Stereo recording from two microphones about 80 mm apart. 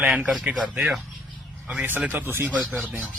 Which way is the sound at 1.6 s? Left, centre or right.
Centre.